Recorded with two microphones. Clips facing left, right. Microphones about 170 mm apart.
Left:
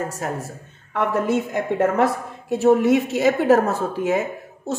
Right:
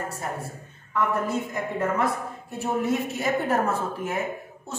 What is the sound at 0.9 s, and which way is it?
A woman's voice, 80° left.